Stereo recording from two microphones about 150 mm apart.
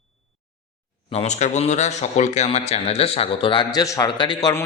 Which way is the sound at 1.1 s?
50° left (ahead or behind).